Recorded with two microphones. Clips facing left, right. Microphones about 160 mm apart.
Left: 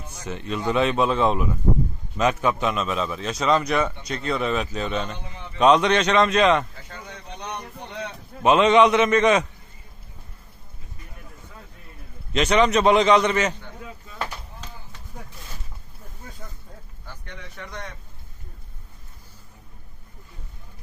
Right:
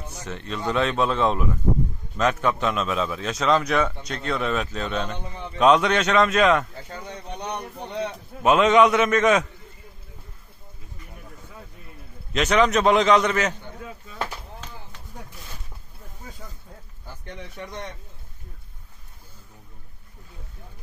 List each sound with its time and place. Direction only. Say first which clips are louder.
0.2 s a man's voice: left 3 dB; 5° left (ahead or behind)
7.8 s a man's voice: right 7 dB; 15° right (ahead or behind)
8.4 s a man's voice: left 1 dB; centre (ahead or behind)
12.3 s a man's voice: left 1 dB; centre (ahead or behind)
17.3 s speech: right 3 dB; 25° right (ahead or behind)